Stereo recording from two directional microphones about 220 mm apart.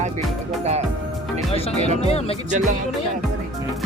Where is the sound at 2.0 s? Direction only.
30° left (ahead or behind).